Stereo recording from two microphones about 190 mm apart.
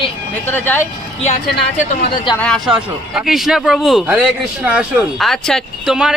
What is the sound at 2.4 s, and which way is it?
Speech, 5° left (ahead or behind).